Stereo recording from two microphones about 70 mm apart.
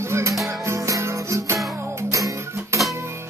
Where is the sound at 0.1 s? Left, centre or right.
Right.